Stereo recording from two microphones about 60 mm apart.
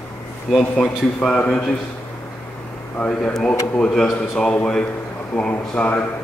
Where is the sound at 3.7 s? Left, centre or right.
Centre.